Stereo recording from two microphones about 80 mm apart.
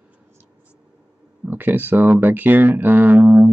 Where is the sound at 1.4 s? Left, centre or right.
Right.